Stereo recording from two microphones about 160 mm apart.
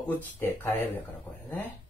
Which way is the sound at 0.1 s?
10° left (ahead or behind).